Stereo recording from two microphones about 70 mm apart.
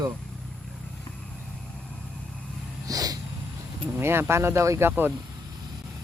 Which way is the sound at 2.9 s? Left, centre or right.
Right.